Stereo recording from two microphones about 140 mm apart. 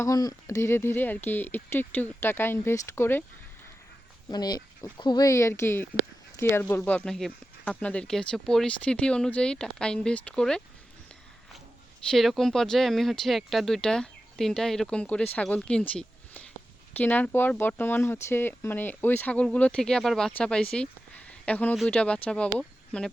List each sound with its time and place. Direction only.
0.0 s speech: 25° left (ahead or behind)
4.3 s speech: 30° left (ahead or behind); by 10.6 s 5° left (ahead or behind)
12.1 s speech: centre (ahead or behind)